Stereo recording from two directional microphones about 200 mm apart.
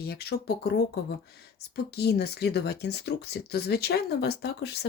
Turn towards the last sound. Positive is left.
turn(degrees=55)  # may be behind; listen again after turning